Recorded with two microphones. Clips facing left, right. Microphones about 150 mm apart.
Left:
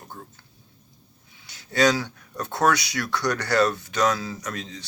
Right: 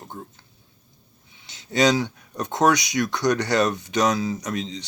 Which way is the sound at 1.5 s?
20° right (ahead or behind).